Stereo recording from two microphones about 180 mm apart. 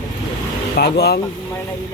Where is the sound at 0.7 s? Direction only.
60° left (ahead or behind).